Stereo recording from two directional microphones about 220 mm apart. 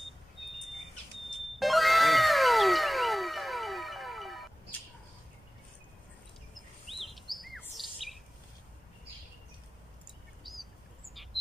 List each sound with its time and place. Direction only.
1.6 s cat: centre (ahead or behind)
6.5 s bird vocalization: centre (ahead or behind)
10.4 s bird: centre (ahead or behind)